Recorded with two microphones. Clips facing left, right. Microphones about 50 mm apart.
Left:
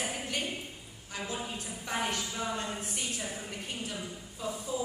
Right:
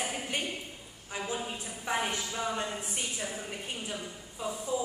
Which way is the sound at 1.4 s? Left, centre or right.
Centre.